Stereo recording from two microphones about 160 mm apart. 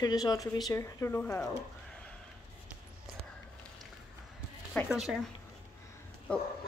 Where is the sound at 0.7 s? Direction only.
15° left (ahead or behind).